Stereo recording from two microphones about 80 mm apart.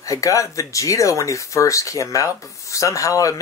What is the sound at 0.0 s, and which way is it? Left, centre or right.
Speech, left.